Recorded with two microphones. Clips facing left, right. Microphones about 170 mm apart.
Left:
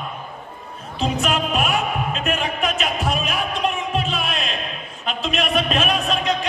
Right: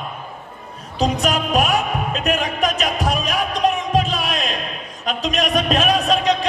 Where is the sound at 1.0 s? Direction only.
40° right (ahead or behind).